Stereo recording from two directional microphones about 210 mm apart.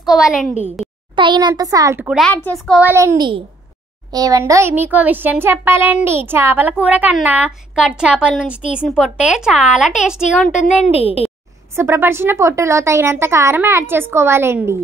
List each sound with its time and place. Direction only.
0.1 s a woman's voice: centre (ahead or behind)
1.1 s a child's voice: 20° right (ahead or behind)
2.0 s a woman's voice: centre (ahead or behind)
2.8 s a child's voice: 10° right (ahead or behind)
10.8 s a child's voice: 30° left (ahead or behind)
11.7 s a child's voice: 10° right (ahead or behind)